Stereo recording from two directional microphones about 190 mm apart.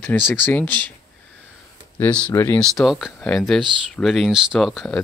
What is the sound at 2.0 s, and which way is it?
Speech, 5° left (ahead or behind).